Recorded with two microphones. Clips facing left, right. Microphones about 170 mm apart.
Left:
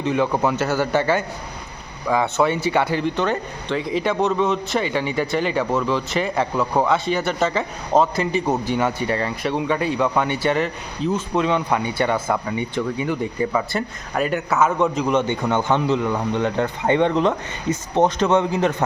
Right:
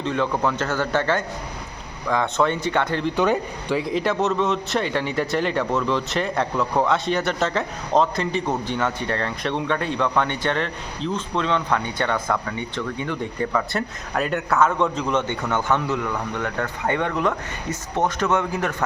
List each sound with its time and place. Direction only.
0.0 s a man's voice: 10° left (ahead or behind)
3.2 s a man's voice: 10° right (ahead or behind); by 18.8 s 20° left (ahead or behind)